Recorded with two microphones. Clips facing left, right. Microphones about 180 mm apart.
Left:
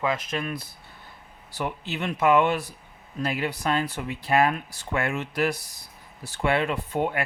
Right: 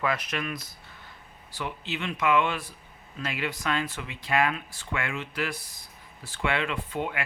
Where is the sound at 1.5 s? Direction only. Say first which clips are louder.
Left 4 dB; 45° left (ahead or behind).